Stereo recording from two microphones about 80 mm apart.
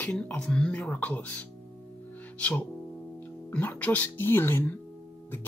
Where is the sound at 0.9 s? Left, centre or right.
Left.